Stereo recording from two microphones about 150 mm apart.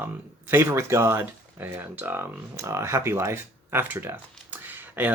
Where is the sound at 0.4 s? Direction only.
15° right (ahead or behind).